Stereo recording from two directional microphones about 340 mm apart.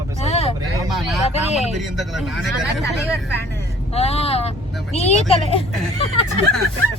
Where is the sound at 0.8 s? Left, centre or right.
Centre.